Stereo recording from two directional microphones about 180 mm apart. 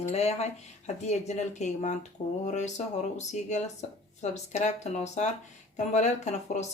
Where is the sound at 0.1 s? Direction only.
35° left (ahead or behind).